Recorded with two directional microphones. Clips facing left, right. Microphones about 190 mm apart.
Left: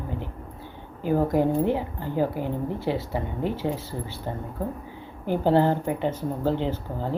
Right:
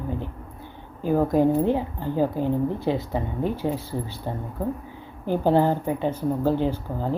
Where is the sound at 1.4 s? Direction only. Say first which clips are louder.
Right 2 dB; 15° right (ahead or behind).